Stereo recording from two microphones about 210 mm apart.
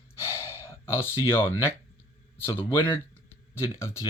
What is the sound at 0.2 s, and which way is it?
Gasp, 10° left (ahead or behind).